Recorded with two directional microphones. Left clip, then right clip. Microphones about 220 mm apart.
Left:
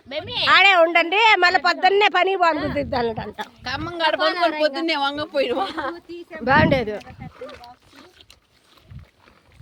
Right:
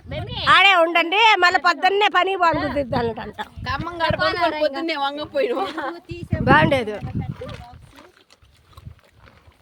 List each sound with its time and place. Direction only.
0.1 s a sound: 30° left (ahead or behind)
0.4 s a woman's voice: 5° left (ahead or behind)
4.3 s a woman's voice: 50° right (ahead or behind)
4.6 s a woman's voice: centre (ahead or behind)
5.9 s a woman's voice: 55° right (ahead or behind)
6.4 s a woman's voice: centre (ahead or behind)